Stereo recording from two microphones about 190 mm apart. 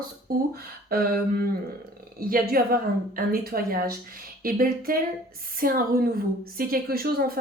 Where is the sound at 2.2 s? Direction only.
50° right (ahead or behind).